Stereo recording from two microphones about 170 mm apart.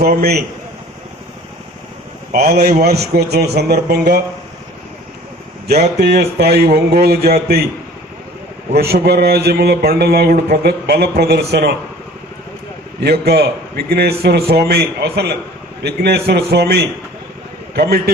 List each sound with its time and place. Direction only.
0.0 s a man's voice: 65° right (ahead or behind)
2.3 s speech: 70° right (ahead or behind)
6.0 s speech: 70° right (ahead or behind)
8.7 s speech: 70° right (ahead or behind)
13.0 s a man's voice: 70° right (ahead or behind)